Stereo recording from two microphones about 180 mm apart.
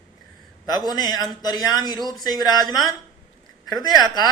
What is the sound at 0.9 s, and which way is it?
A man's voice, 20° left (ahead or behind).